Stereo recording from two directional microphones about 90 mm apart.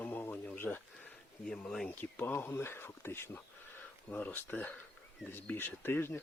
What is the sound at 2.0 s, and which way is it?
Speech, 20° left (ahead or behind).